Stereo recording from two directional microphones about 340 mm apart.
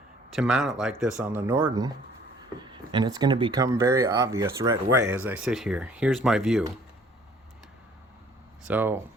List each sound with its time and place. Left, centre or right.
0.3 s speech: centre
8.6 s speech: centre